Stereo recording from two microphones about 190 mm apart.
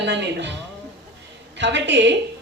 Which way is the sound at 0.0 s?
65° right (ahead or behind).